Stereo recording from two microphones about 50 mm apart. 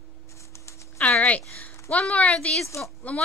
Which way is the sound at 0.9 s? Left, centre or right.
Left.